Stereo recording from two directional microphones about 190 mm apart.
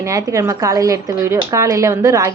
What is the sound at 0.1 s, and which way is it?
Speech, 20° right (ahead or behind).